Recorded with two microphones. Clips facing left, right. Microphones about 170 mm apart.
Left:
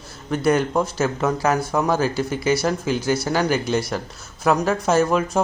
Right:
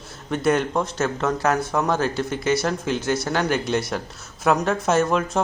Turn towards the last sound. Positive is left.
turn(degrees=0)  # may be behind; listen again after turning